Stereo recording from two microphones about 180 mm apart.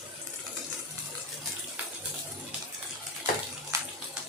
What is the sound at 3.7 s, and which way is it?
Bathtub, 15° right (ahead or behind).